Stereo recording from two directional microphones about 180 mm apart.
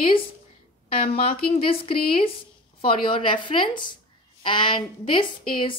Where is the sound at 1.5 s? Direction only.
30° left (ahead or behind).